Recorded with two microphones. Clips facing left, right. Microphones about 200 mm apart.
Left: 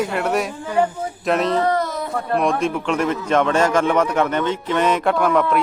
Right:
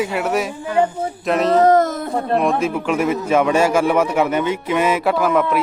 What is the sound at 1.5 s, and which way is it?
Speech, 45° right (ahead or behind).